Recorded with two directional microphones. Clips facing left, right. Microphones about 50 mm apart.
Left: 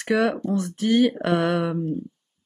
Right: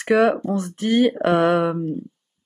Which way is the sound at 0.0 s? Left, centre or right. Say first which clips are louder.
Right 5 dB; centre.